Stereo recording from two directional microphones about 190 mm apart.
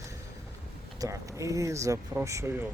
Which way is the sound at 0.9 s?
15° right (ahead or behind).